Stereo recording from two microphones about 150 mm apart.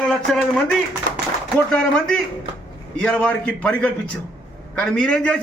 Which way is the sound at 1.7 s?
5° left (ahead or behind).